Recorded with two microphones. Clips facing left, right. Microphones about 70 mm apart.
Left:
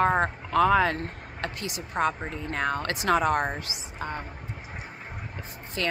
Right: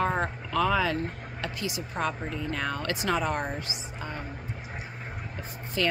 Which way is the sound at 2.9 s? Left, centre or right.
Left.